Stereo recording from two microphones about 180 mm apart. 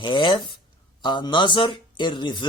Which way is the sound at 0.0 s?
25° left (ahead or behind).